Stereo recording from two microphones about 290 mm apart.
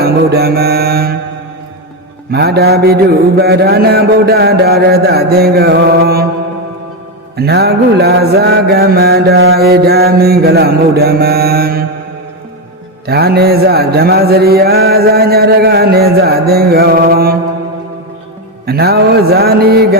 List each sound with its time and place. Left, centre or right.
0.0 s mantra: right
2.3 s mantra: right
7.3 s mantra: right
13.1 s mantra: right
18.6 s mantra: right